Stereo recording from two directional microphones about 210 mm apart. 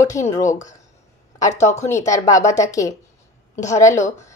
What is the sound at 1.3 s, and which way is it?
Speech, 15° left (ahead or behind).